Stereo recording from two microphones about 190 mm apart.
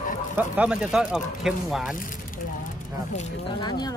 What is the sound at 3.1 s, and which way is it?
Speech, 30° left (ahead or behind).